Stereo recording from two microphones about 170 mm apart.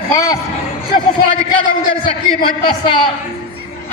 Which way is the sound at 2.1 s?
30° left (ahead or behind).